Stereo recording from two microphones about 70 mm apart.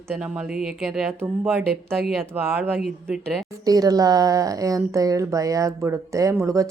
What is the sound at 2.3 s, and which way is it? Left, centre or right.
Speech, right.